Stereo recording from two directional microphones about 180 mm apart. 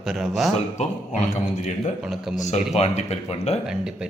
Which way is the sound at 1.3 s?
40° left (ahead or behind).